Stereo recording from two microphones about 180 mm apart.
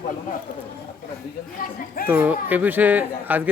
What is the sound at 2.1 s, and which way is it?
A man's voice, 10° right (ahead or behind).